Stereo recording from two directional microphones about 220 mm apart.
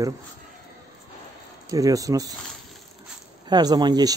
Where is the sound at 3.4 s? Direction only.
20° right (ahead or behind).